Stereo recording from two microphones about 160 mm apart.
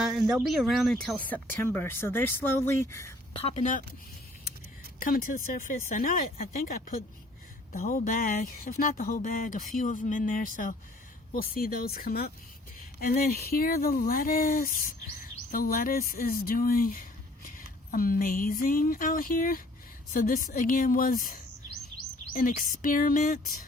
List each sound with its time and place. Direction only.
0.0 s speech: centre (ahead or behind); by 3.1 s 15° left (ahead or behind)
3.3 s speech: 40° left (ahead or behind)
4.9 s speech: 65° left (ahead or behind)